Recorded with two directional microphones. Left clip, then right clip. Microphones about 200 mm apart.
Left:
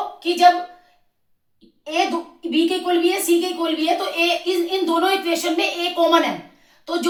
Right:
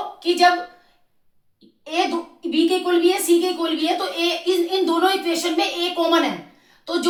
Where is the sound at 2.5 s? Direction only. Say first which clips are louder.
Even; 20° right (ahead or behind).